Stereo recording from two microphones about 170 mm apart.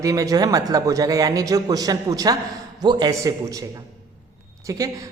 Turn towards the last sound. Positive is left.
turn(degrees=-20)  # may be behind; listen again after turning